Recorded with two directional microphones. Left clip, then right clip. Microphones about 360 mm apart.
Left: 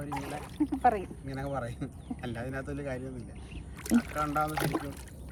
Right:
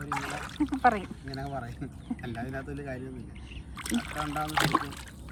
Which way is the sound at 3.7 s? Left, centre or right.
Right.